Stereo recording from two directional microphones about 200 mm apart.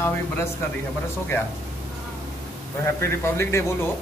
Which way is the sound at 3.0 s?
15° left (ahead or behind).